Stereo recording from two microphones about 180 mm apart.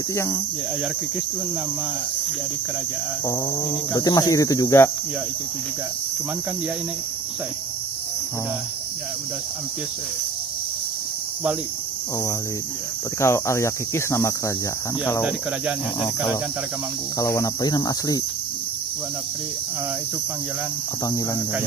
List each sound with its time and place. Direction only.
0.1 s speech: 15° left (ahead or behind)
3.3 s speech: 20° left (ahead or behind)
13.2 s speech: 15° left (ahead or behind)
16.0 s speech: 15° left (ahead or behind)